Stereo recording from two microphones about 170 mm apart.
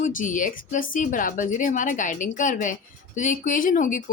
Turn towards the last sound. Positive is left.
turn(degrees=50)  # may be behind; listen again after turning